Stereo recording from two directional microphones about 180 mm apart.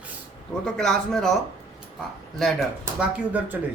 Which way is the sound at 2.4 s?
Centre (ahead or behind).